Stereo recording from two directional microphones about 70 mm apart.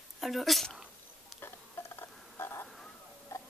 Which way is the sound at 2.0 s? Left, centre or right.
Left.